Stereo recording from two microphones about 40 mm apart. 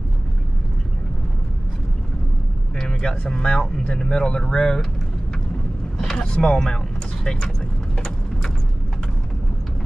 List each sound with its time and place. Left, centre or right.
2.9 s speech: centre
5.9 s vehicle: centre
6.3 s speech: centre